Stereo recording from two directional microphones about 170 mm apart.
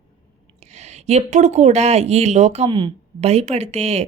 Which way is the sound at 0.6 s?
40° right (ahead or behind).